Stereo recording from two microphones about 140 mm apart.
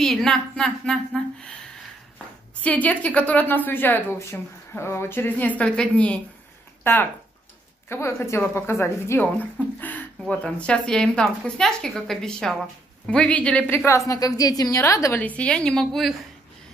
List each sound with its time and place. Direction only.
0.0 s a woman's voice: 5° left (ahead or behind)
2.6 s a woman's voice: 10° left (ahead or behind)